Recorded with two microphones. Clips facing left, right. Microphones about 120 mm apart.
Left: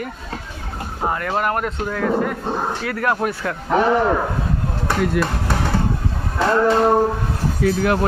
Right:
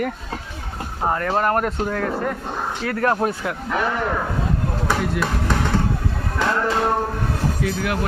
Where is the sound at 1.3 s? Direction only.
35° right (ahead or behind).